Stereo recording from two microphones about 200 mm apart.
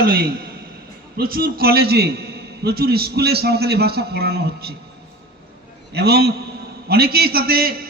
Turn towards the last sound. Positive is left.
turn(degrees=-45)  # may be behind; listen again after turning